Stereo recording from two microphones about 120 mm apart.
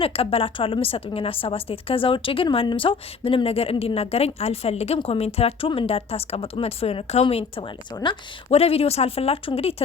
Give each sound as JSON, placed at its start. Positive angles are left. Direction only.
{"t": 0.0, "sound": "a woman's voice", "side_deg": 50}